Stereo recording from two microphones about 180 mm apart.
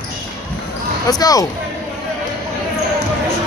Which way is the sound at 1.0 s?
20° left (ahead or behind).